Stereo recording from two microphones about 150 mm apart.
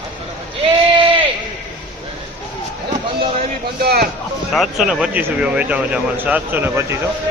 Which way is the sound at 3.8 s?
90° right.